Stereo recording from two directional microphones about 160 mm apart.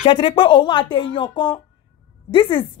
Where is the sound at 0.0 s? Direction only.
35° left (ahead or behind).